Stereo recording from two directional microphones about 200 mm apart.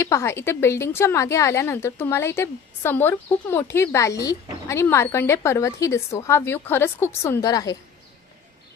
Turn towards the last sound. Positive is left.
turn(degrees=15)  # may be behind; listen again after turning